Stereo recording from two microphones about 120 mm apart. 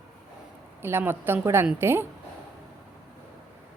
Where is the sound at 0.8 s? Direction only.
20° right (ahead or behind).